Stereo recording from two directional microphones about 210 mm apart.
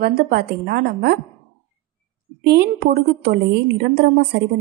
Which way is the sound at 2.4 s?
50° right (ahead or behind).